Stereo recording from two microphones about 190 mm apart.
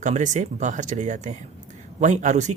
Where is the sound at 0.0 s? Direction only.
40° right (ahead or behind).